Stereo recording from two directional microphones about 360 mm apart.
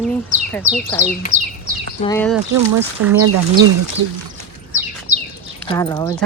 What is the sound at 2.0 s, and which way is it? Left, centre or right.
Speech, centre.